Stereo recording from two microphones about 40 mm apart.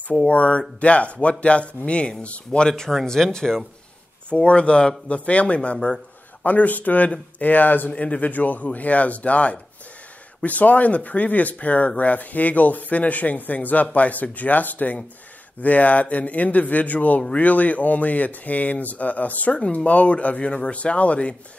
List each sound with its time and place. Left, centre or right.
0.3 s speech: left
3.1 s speech: centre
4.3 s speech: left
6.4 s speech: left
7.9 s speech: left
8.2 s speech: left